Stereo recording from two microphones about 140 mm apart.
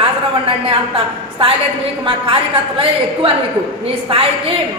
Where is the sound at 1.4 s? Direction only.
40° right (ahead or behind).